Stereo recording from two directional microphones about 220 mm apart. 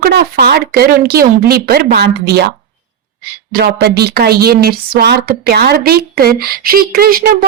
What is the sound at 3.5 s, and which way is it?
Speech, 45° right (ahead or behind).